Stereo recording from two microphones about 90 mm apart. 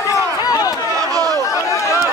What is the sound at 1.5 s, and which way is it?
Run, 35° left (ahead or behind).